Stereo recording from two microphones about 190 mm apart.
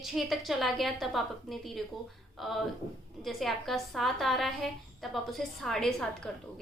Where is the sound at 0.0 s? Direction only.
Centre (ahead or behind).